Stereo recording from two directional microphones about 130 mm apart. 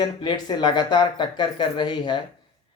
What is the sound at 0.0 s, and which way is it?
Speech, 35° left (ahead or behind).